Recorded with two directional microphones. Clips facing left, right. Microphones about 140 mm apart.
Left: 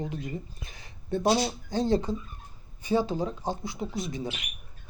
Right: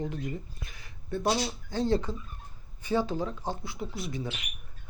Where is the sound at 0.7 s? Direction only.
25° left (ahead or behind).